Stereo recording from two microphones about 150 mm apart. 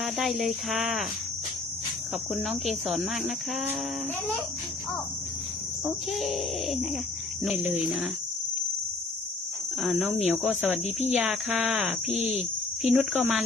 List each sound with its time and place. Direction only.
0.0 s speech: centre (ahead or behind)
2.3 s speech: centre (ahead or behind)
6.1 s speech: centre (ahead or behind)
9.8 s speech: 5° right (ahead or behind)
12.0 s speech: 45° left (ahead or behind)
12.8 s speech: 10° right (ahead or behind)